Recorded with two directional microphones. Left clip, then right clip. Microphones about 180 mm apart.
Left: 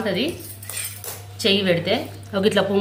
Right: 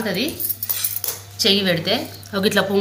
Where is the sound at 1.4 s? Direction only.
5° left (ahead or behind).